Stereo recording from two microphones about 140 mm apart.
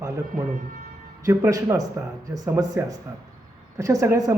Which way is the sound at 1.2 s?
25° right (ahead or behind).